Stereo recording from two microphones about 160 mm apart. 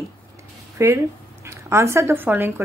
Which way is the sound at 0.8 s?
15° right (ahead or behind).